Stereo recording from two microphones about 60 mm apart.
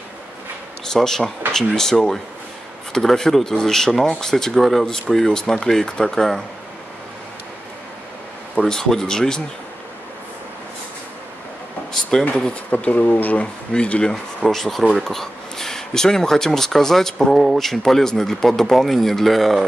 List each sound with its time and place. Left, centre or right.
0.8 s speech: centre
8.5 s speech: centre
11.9 s speech: centre
12.7 s speech: left
14.4 s speech: centre